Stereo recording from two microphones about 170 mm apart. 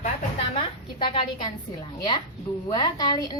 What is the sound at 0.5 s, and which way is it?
Speech, 30° left (ahead or behind).